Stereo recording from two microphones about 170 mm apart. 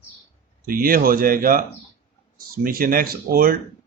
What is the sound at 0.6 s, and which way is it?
Speech, 60° right (ahead or behind).